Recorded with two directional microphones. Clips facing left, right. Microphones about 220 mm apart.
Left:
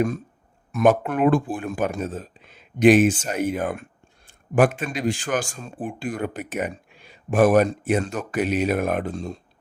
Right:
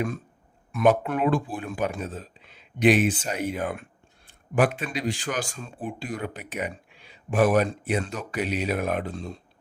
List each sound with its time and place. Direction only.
0.7 s speech: 45° left (ahead or behind)